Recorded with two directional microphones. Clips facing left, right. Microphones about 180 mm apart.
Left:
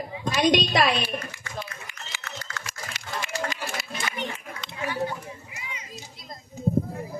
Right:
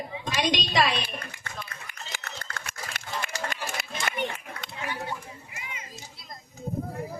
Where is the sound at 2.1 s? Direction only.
55° right (ahead or behind).